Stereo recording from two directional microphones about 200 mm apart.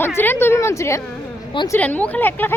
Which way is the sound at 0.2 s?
10° left (ahead or behind).